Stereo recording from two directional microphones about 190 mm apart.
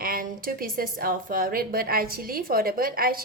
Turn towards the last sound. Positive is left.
turn(degrees=-50)  # may be behind; listen again after turning